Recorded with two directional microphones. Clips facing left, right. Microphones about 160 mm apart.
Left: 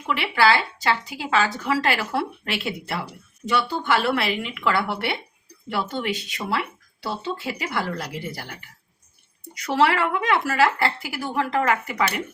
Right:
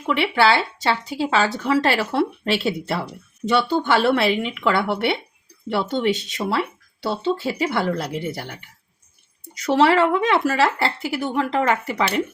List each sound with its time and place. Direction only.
0.1 s speech: 25° right (ahead or behind)
9.6 s speech: 25° right (ahead or behind)